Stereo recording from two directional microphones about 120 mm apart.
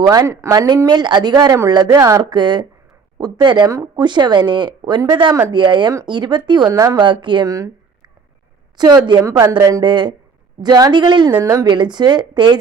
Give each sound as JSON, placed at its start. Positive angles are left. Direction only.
{"t": 0.1, "sound": "speech", "side_deg": -30}
{"t": 7.4, "sound": "speech", "side_deg": -30}
{"t": 8.8, "sound": "speech", "side_deg": -35}
{"t": 9.8, "sound": "speech", "side_deg": -40}
{"t": 11.3, "sound": "a woman's voice", "side_deg": -15}
{"t": 11.5, "sound": "speech", "side_deg": -35}